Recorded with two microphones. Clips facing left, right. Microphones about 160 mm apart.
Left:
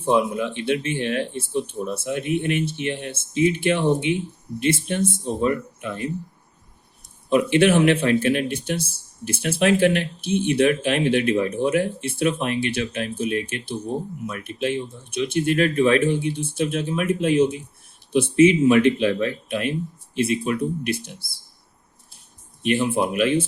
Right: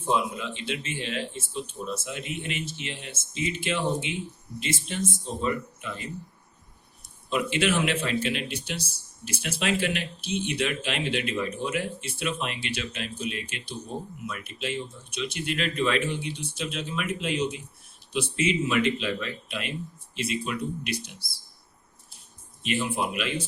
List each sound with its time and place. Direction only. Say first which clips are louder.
0.0 s speech: left 7 dB; 55° left (ahead or behind)
7.3 s speech: left 9 dB; 55° left (ahead or behind)
23.0 s speech: left 9 dB; 50° left (ahead or behind)